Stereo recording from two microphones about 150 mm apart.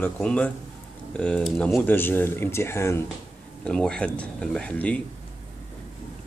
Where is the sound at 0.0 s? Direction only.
5° left (ahead or behind).